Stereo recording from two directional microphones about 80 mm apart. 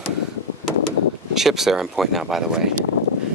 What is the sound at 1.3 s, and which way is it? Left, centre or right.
Speech, centre.